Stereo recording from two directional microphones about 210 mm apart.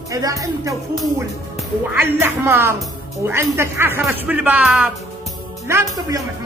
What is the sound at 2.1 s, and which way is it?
Speech, 10° right (ahead or behind).